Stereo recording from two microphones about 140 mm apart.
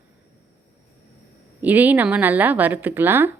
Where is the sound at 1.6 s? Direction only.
10° right (ahead or behind).